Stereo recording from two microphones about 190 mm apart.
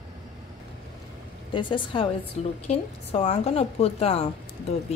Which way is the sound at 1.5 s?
25° left (ahead or behind).